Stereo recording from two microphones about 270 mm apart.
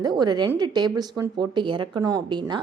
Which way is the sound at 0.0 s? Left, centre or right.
Centre.